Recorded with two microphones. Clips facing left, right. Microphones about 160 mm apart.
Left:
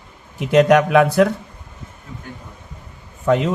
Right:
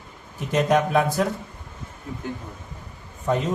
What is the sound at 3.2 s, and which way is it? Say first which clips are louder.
Speech: left 6 dB; 90° left.